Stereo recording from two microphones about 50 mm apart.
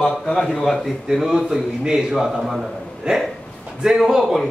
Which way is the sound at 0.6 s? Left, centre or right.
Centre.